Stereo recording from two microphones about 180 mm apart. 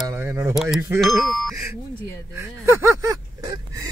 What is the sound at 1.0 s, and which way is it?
Speech, centre (ahead or behind).